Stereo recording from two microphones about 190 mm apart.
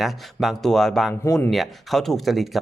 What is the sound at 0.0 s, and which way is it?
Speech, centre (ahead or behind).